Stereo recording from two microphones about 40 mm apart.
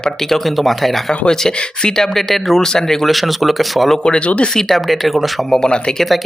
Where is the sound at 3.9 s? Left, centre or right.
Left.